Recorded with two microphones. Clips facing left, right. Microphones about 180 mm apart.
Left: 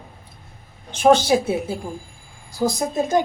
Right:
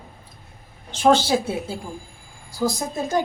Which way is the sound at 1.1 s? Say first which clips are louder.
Left 4 dB; 15° left (ahead or behind).